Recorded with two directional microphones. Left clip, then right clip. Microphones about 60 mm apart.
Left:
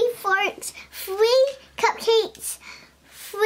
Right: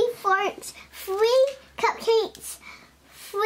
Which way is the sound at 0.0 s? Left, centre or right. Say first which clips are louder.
Left 1 dB; left.